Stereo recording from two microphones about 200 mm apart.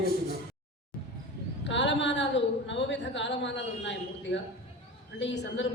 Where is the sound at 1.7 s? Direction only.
65° left (ahead or behind).